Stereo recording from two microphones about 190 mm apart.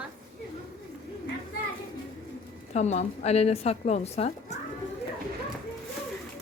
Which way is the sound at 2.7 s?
35° left (ahead or behind).